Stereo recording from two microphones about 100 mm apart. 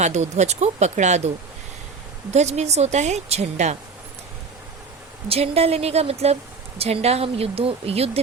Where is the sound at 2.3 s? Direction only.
90° right.